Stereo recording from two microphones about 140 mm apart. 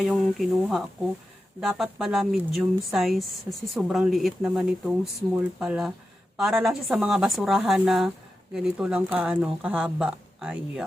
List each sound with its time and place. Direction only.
0.0 s speech: centre (ahead or behind)